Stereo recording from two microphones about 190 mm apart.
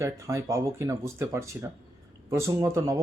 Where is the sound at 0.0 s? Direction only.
15° right (ahead or behind).